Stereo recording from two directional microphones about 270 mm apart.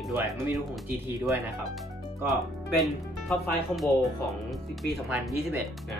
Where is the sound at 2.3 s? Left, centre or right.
Centre.